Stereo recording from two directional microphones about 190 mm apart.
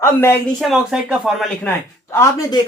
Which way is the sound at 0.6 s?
Centre (ahead or behind).